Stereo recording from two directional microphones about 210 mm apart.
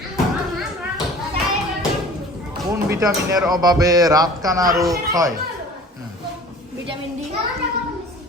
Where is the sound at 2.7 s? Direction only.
15° right (ahead or behind).